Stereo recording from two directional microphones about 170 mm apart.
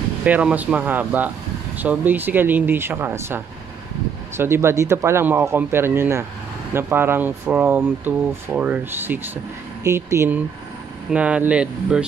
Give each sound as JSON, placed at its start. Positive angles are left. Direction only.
{"t": 0.2, "sound": "speech", "side_deg": -5}